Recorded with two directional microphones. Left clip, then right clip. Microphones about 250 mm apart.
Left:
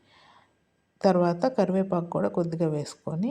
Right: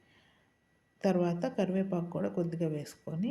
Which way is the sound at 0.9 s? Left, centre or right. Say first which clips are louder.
Left 8 dB; left.